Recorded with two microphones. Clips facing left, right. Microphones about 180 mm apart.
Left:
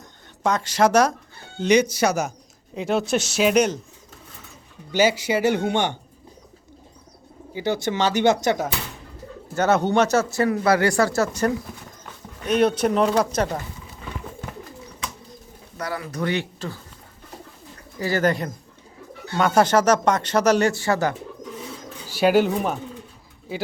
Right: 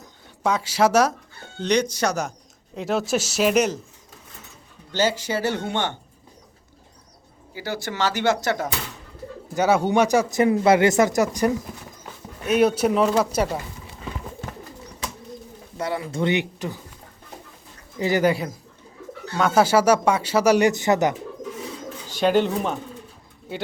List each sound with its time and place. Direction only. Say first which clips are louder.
0.4 s speech: left 1 dB; 5° right (ahead or behind)
1.5 s speech: left 3 dB; 5° left (ahead or behind)
4.9 s speech: left 3 dB; 10° left (ahead or behind)
7.5 s speech: left 6 dB; 20° left (ahead or behind)
9.6 s speech: even; 10° right (ahead or behind)
15.8 s speech: right 3 dB; 25° right (ahead or behind)
18.0 s speech: right 1 dB; 15° right (ahead or behind)
22.0 s speech: left 2 dB; 10° left (ahead or behind)